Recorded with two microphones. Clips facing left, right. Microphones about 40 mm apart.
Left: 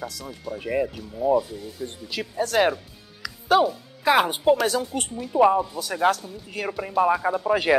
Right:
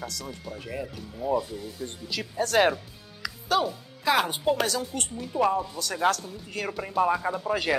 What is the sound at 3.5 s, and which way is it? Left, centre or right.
Speech, centre.